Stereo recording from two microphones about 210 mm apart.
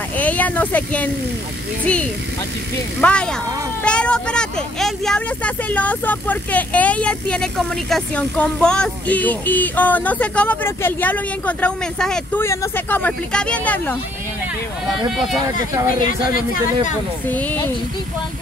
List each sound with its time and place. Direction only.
0.2 s speech: 5° left (ahead or behind)
3.0 s speech: 5° left (ahead or behind)
15.1 s speech: centre (ahead or behind)
15.5 s speech: 40° left (ahead or behind)
17.3 s speech: 10° left (ahead or behind)